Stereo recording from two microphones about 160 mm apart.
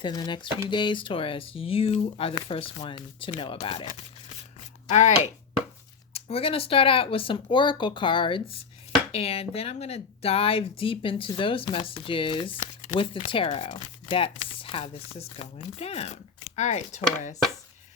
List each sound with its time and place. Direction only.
0.0 s speech: 25° left (ahead or behind)
4.9 s speech: 45° left (ahead or behind)